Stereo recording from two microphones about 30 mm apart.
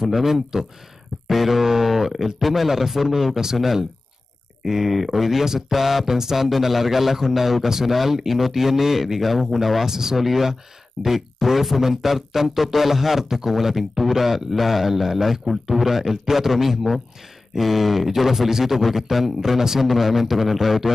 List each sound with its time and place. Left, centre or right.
0.0 s a man's voice: centre